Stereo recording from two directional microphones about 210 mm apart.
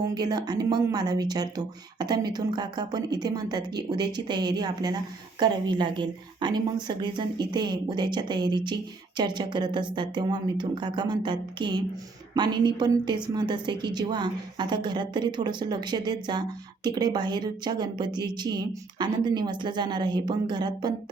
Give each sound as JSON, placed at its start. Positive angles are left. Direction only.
{"t": 0.0, "sound": "speech", "side_deg": -20}